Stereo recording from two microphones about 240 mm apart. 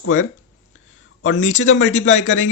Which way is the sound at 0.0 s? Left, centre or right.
Left.